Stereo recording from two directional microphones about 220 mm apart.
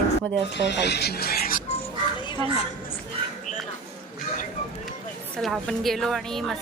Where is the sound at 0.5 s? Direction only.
50° left (ahead or behind).